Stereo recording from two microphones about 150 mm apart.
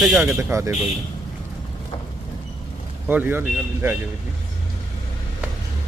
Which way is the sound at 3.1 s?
10° right (ahead or behind).